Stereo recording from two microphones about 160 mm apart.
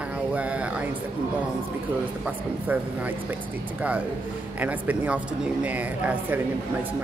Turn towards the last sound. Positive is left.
turn(degrees=-10)  # may be behind; listen again after turning